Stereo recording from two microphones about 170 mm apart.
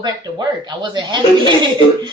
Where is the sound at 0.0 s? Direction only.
25° right (ahead or behind).